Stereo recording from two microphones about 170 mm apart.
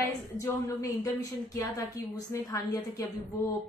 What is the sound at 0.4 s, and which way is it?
Speech, 20° left (ahead or behind).